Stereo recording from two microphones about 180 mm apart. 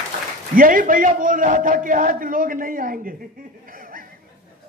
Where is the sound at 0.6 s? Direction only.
50° right (ahead or behind).